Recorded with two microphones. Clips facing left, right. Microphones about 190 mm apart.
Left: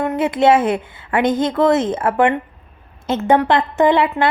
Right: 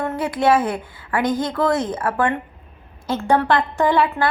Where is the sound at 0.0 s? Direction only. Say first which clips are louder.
Left 4 dB; 20° left (ahead or behind).